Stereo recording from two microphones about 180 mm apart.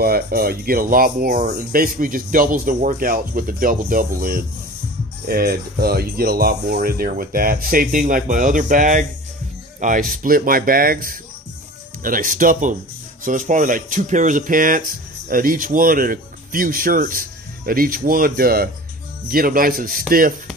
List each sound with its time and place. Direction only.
0.0 s speech: 55° right (ahead or behind)